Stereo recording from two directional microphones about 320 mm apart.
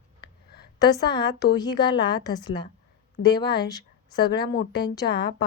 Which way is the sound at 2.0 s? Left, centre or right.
Left.